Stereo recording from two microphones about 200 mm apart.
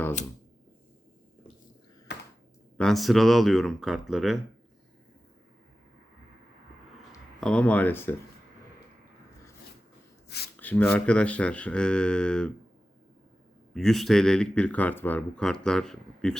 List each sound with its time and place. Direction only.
2.7 s speech: centre (ahead or behind)
7.4 s speech: 5° left (ahead or behind)
10.2 s speech: 55° left (ahead or behind)
10.6 s speech: 10° left (ahead or behind)
13.7 s speech: centre (ahead or behind)